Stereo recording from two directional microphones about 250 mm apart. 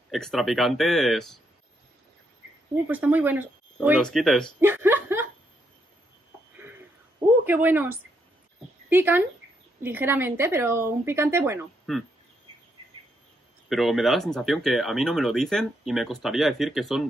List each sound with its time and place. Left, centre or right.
0.1 s speech: centre
2.9 s speech: centre
7.4 s speech: centre
11.9 s speech: centre
13.7 s speech: centre